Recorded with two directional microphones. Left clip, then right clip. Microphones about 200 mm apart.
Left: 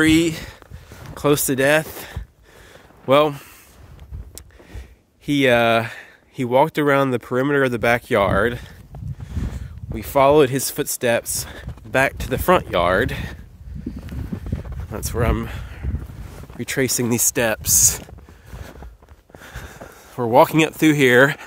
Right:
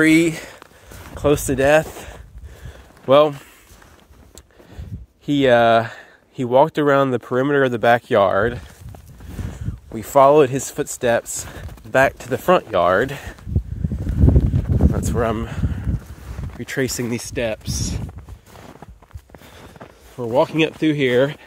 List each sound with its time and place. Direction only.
0.0 s speech: 5° left (ahead or behind)
1.1 s speech: 20° left (ahead or behind)
5.2 s speech: 10° left (ahead or behind)
9.9 s speech: 5° left (ahead or behind)
10.4 s speech: 20° left (ahead or behind)
11.4 s speech: 45° right (ahead or behind)
11.9 s speech: 15° left (ahead or behind)
12.4 s speech: 25° left (ahead or behind)
14.9 s speech: 15° left (ahead or behind)
17.1 s speech: 30° left (ahead or behind)
20.2 s speech: 35° left (ahead or behind)